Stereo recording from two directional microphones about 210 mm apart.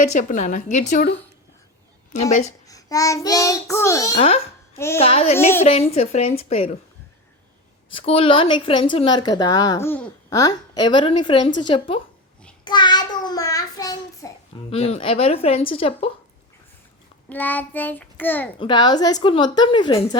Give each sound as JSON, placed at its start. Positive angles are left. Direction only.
{"t": 0.1, "sound": "a woman's voice", "side_deg": 35}
{"t": 2.5, "sound": "child singing", "side_deg": 15}
{"t": 4.2, "sound": "a woman's voice", "side_deg": 30}
{"t": 7.9, "sound": "a woman's voice", "side_deg": 25}
{"t": 12.6, "sound": "child singing", "side_deg": 20}
{"t": 14.7, "sound": "a woman's voice", "side_deg": 30}
{"t": 17.2, "sound": "child singing", "side_deg": 10}
{"t": 18.6, "sound": "a woman's voice", "side_deg": 20}